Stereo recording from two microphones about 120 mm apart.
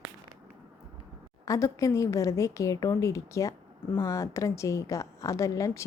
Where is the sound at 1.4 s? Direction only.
25° left (ahead or behind).